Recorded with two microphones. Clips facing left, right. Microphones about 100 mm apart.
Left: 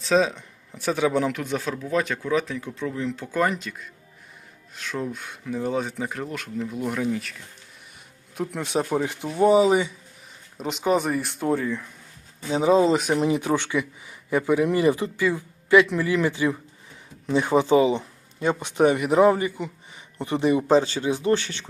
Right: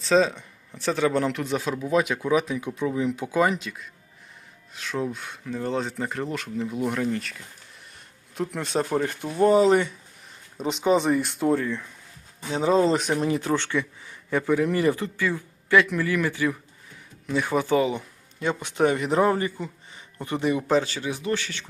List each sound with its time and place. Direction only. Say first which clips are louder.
0.0 s speech: even; centre (ahead or behind)
8.6 s speech: left 1 dB; 10° left (ahead or behind)
13.1 s speech: left 2 dB; 15° left (ahead or behind)